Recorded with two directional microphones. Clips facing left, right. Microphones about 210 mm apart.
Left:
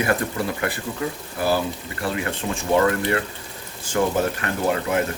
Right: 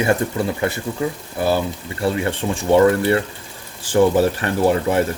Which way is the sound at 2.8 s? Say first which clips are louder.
Right 6 dB; 30° right (ahead or behind).